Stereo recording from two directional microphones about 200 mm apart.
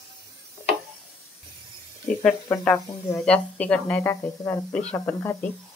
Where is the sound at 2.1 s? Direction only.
5° left (ahead or behind).